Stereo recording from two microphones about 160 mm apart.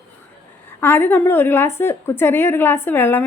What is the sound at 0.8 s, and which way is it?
A woman's voice, 15° left (ahead or behind).